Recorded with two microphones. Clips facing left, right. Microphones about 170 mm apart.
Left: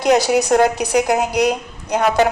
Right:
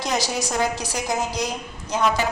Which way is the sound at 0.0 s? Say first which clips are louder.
Left 10 dB; 65° left (ahead or behind).